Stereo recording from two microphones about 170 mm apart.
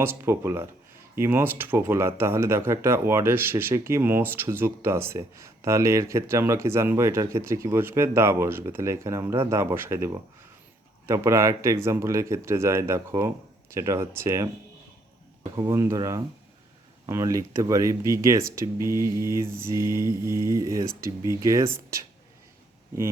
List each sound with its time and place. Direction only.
0.0 s speech: 15° right (ahead or behind)
15.5 s speech: 20° right (ahead or behind)